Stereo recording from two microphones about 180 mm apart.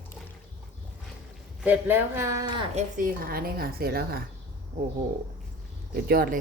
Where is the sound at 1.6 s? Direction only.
10° right (ahead or behind).